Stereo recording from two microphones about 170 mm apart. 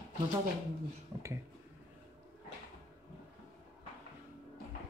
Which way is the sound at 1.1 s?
20° right (ahead or behind).